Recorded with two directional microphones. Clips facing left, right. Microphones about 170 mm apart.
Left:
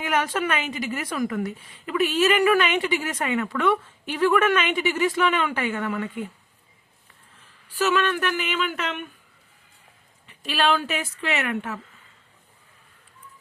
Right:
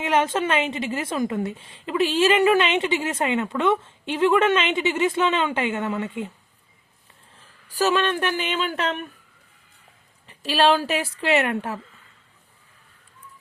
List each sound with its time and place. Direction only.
0.0 s a woman's voice: 25° right (ahead or behind)
7.7 s a woman's voice: 35° right (ahead or behind)
10.2 s a woman's voice: 35° right (ahead or behind)